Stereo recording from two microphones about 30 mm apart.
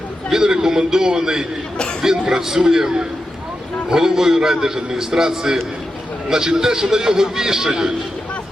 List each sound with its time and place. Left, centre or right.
0.3 s a man's voice: right